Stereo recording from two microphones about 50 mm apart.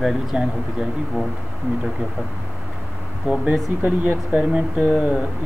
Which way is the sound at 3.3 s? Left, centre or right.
Right.